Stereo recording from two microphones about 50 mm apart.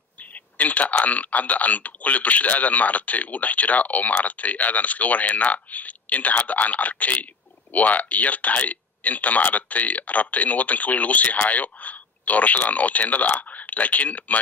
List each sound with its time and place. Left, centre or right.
0.2 s speech: left